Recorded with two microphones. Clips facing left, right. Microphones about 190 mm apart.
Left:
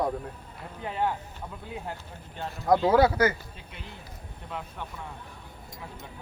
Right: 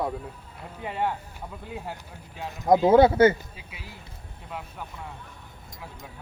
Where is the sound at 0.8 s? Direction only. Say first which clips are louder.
Even; 5° right (ahead or behind).